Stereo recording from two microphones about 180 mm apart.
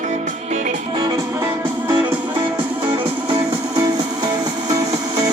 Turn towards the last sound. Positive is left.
turn(degrees=-20)  # may be behind; listen again after turning